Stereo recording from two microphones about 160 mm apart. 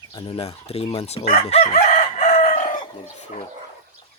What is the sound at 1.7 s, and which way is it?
Chicken, 50° left (ahead or behind).